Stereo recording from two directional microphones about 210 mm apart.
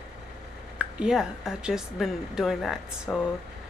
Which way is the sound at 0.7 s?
5° right (ahead or behind).